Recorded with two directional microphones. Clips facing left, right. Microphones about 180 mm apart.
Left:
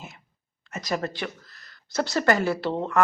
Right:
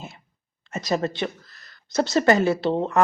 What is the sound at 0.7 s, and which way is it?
Speech, 25° right (ahead or behind).